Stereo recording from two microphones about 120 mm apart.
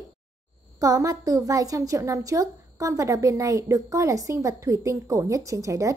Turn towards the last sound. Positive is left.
turn(degrees=-25)  # may be behind; listen again after turning